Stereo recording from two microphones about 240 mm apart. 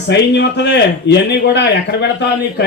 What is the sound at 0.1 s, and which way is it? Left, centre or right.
Speech, left.